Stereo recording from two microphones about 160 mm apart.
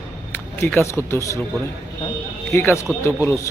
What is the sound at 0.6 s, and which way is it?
Speech, 15° left (ahead or behind).